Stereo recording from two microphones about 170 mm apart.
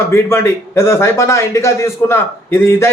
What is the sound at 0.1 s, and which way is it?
A man's voice, 15° left (ahead or behind).